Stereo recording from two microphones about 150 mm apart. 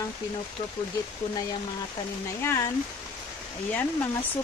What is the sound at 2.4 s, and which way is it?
Speech, 15° left (ahead or behind).